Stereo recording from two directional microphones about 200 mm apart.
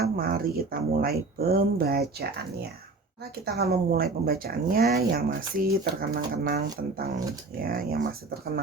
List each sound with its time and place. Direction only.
0.0 s speech: 45° right (ahead or behind)
3.4 s speech: 50° right (ahead or behind)